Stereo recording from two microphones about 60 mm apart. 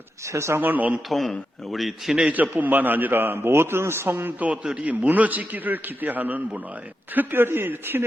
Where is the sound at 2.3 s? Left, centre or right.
Right.